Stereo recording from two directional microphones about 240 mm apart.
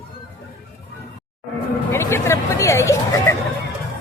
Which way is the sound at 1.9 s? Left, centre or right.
Centre.